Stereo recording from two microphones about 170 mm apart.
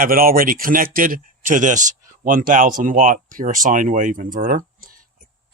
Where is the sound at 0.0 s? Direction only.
60° right (ahead or behind).